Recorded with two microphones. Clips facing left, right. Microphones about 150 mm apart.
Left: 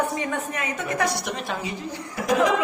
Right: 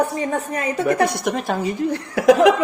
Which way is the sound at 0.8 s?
55° right (ahead or behind).